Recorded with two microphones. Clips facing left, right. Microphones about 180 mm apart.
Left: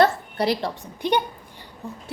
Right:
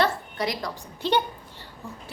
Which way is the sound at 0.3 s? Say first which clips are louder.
Left 6 dB; 30° left (ahead or behind).